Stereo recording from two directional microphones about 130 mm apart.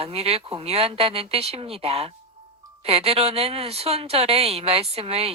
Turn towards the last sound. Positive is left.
turn(degrees=-50)  # may be behind; listen again after turning